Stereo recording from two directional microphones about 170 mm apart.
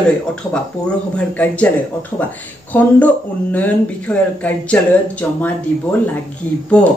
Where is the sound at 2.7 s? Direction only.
10° left (ahead or behind).